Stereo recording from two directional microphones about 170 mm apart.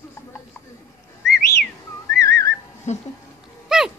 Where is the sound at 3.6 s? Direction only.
5° right (ahead or behind).